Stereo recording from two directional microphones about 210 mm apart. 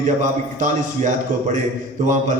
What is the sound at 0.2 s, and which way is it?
Speech, 35° right (ahead or behind).